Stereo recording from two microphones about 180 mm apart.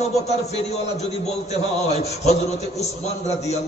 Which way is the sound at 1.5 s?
35° left (ahead or behind).